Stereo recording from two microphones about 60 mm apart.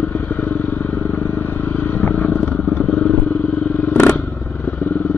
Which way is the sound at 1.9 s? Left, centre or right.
Left.